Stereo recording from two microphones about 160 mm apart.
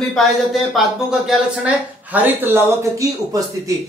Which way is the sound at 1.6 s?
10° right (ahead or behind).